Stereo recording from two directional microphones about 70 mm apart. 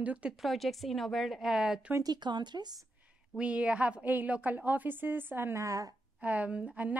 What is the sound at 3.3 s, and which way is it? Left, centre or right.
A woman's voice, centre.